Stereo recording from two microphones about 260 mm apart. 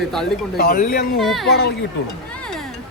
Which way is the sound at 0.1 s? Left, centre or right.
Centre.